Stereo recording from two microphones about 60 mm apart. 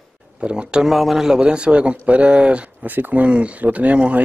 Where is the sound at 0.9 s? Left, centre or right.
Centre.